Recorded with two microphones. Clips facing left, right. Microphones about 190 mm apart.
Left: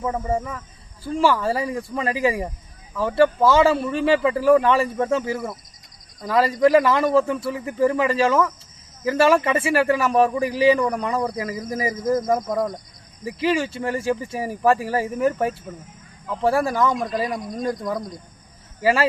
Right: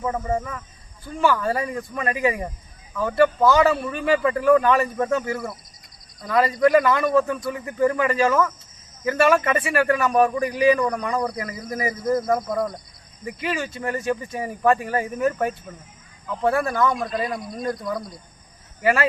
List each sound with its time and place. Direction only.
0.3 s speech: 25° left (ahead or behind)
18.8 s speech: 30° left (ahead or behind)